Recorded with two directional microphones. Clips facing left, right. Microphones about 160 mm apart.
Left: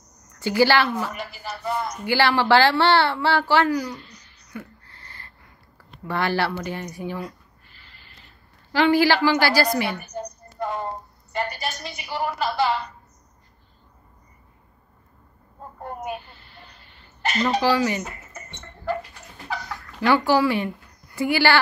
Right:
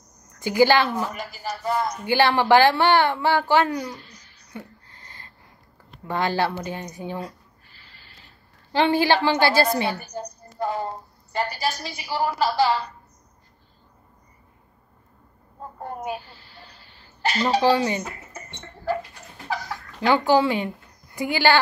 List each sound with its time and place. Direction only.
0.4 s speech: 15° right (ahead or behind)
0.8 s a woman's voice: 40° right (ahead or behind)
2.0 s speech: 20° right (ahead or behind)
4.6 s a sound: 15° right (ahead or behind)
6.0 s a woman's voice: 15° right (ahead or behind)
7.2 s a sound: 35° right (ahead or behind)
8.7 s a woman's voice: 20° right (ahead or behind)
11.3 s a woman's voice: 35° right (ahead or behind)
16.1 s a sound: 35° right (ahead or behind)
20.1 s a woman's voice: 20° right (ahead or behind)